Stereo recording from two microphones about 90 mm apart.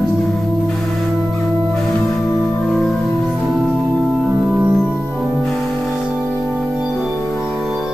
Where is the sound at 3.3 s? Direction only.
5° right (ahead or behind).